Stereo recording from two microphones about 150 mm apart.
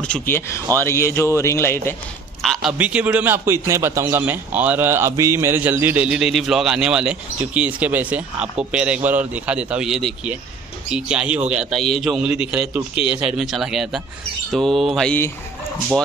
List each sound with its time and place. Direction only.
0.0 s speech: 10° left (ahead or behind)
2.4 s a man's voice: centre (ahead or behind)
2.8 s a man's voice: 10° right (ahead or behind)